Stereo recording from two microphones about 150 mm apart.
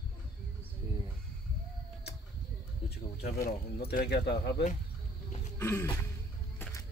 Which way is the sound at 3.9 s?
80° left.